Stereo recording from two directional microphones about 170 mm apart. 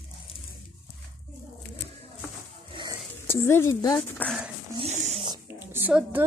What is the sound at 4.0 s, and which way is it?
Speech, 5° left (ahead or behind).